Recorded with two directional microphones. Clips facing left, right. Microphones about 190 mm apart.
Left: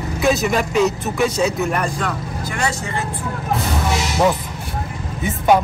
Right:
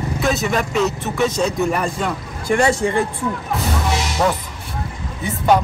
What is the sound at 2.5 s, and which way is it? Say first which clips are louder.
Speech: right 9 dB; 30° right (ahead or behind).